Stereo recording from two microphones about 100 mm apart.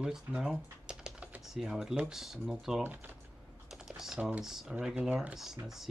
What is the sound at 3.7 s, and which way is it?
Speech, 5° right (ahead or behind).